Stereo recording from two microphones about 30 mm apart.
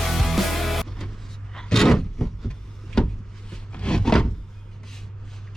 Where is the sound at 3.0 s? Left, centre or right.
Left.